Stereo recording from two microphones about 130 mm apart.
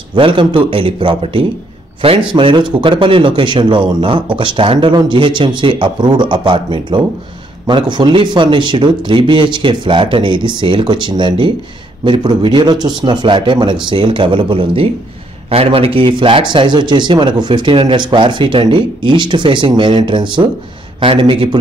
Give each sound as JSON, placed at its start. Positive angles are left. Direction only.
{"t": 0.1, "sound": "a man's voice", "side_deg": -40}